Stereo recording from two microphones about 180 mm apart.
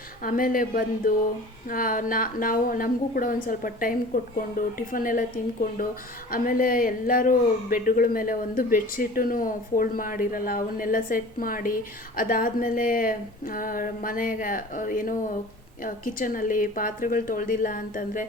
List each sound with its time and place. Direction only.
0.2 s speech: 50° left (ahead or behind)
6.3 s speech: 50° left (ahead or behind)